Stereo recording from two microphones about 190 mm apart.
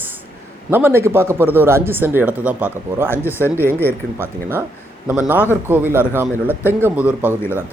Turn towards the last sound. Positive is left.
turn(degrees=-10)  # may be behind; listen again after turning